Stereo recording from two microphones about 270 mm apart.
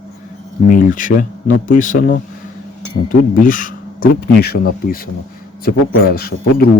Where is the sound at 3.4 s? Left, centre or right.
Left.